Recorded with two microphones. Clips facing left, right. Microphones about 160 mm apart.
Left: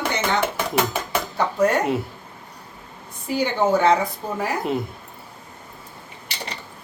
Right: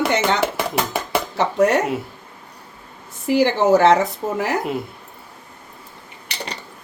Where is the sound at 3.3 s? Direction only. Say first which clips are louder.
Right 5 dB; 90° right.